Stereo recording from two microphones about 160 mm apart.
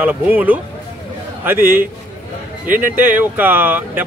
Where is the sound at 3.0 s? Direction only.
10° right (ahead or behind).